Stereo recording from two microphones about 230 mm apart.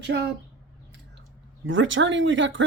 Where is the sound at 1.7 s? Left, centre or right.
Right.